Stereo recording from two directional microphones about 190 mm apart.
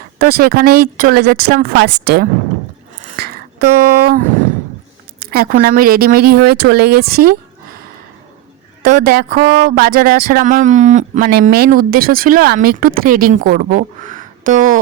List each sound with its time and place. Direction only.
0.2 s speech: 55° right (ahead or behind)
3.2 s a sound: 55° right (ahead or behind)
5.2 s speech: 55° right (ahead or behind)
8.8 s speech: 45° right (ahead or behind)
11.2 s speech: 55° right (ahead or behind)